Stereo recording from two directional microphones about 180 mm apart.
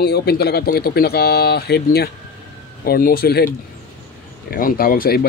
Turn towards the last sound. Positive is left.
turn(degrees=55)  # may be behind; listen again after turning